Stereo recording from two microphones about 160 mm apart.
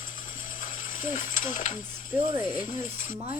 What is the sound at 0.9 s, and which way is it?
Mechanisms, 55° left (ahead or behind).